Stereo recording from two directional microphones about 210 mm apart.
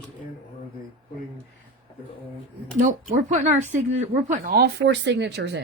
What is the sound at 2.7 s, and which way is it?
Speech, 35° right (ahead or behind).